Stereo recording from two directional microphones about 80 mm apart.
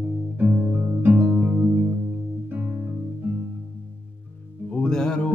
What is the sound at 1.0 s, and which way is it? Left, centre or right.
Music, right.